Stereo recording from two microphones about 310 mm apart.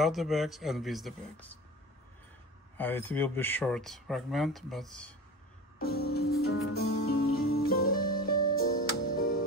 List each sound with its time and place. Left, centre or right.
0.0 s speech: centre
2.8 s speech: centre
5.8 s music: left